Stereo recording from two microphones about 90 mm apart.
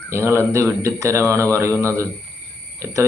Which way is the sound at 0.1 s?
30° right (ahead or behind).